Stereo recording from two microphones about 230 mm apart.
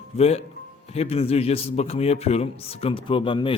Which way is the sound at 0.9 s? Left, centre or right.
Left.